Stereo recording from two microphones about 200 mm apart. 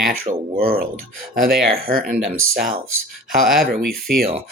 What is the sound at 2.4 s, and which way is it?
Speech, 90° right.